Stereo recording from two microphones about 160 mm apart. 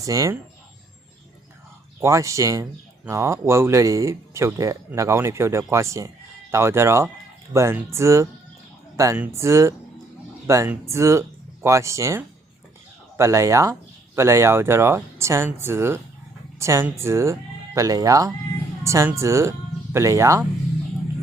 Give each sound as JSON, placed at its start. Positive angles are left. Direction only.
{"t": 0.0, "sound": "speech", "side_deg": -20}
{"t": 2.0, "sound": "speech", "side_deg": -20}